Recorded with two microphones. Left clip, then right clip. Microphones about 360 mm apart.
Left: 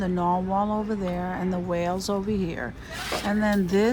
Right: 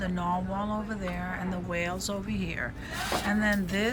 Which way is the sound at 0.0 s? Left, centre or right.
Centre.